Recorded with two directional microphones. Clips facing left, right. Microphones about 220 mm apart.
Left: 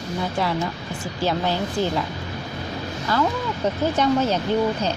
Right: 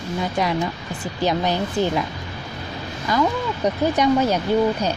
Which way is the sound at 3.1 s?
15° right (ahead or behind).